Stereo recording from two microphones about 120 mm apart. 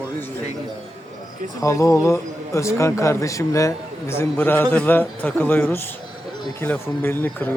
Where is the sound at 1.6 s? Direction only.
25° left (ahead or behind).